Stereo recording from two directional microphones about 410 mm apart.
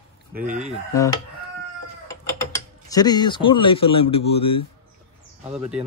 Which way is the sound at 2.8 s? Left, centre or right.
Centre.